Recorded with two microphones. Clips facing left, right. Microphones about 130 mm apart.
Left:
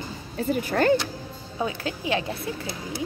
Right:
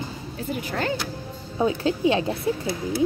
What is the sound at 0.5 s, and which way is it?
Speech, 50° left (ahead or behind).